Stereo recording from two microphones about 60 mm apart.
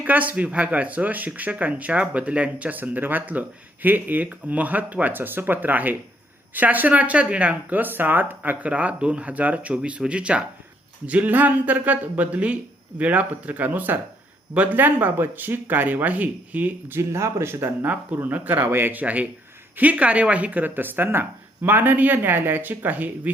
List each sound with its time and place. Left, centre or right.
0.0 s speech: right
16.9 s speech: right
17.8 s speech: right